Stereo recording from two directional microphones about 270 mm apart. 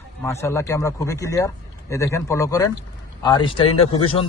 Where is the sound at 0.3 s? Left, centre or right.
Centre.